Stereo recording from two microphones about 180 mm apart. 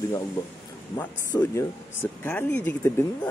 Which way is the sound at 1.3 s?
15° left (ahead or behind).